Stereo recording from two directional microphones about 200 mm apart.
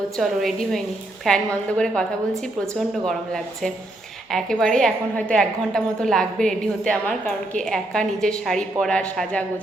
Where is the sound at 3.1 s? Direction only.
5° left (ahead or behind).